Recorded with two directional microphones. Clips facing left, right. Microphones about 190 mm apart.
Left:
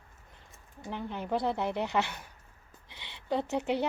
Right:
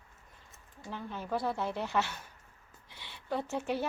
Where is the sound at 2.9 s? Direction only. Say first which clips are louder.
Left 4 dB; 20° left (ahead or behind).